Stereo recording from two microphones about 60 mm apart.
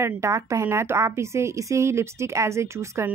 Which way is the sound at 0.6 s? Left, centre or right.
Right.